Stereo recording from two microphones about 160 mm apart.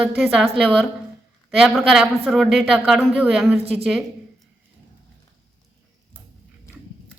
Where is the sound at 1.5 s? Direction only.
Centre (ahead or behind).